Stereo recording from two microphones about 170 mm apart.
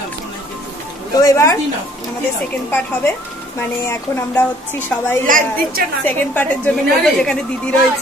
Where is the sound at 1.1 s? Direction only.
20° left (ahead or behind).